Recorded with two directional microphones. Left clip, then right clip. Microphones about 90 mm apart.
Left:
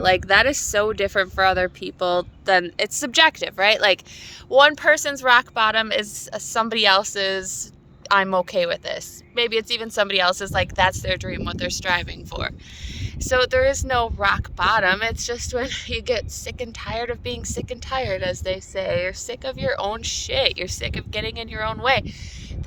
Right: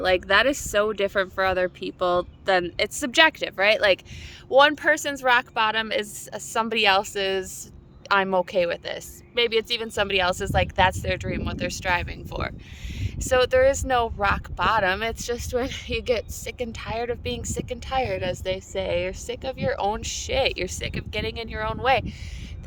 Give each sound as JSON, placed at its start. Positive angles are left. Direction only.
{"t": 0.0, "sound": "speech", "side_deg": -40}